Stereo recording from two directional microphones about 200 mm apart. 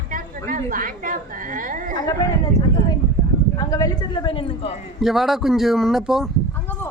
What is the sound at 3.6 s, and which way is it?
Speech, 15° left (ahead or behind).